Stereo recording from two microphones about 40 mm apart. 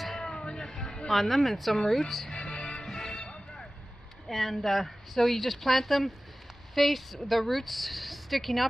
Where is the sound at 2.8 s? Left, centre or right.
Centre.